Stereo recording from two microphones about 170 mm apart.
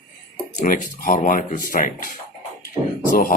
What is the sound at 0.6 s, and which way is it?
Speech, 50° left (ahead or behind).